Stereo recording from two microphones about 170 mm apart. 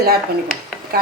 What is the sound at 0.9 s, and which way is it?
Speech, 65° right (ahead or behind).